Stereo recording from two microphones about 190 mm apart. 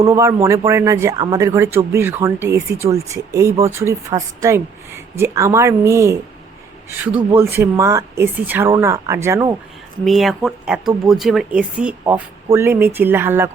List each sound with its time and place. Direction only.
0.1 s a man's voice: 15° right (ahead or behind)
10.0 s a man's voice: centre (ahead or behind)